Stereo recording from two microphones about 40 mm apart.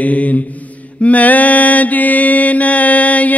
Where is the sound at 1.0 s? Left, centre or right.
Left.